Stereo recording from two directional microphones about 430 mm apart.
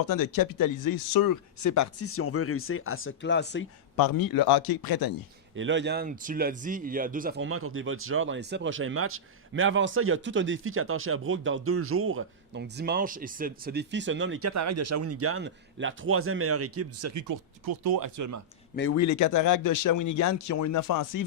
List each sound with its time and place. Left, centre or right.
0.1 s speech: left
3.9 s speech: left
5.5 s speech: right
18.9 s speech: left